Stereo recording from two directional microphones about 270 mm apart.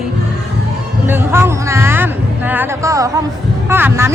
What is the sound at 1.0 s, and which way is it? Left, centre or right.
Speech, centre.